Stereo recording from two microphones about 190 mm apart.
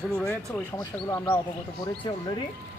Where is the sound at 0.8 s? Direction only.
15° left (ahead or behind).